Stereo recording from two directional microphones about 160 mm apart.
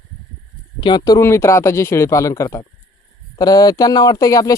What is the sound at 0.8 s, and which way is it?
Speech, 30° left (ahead or behind).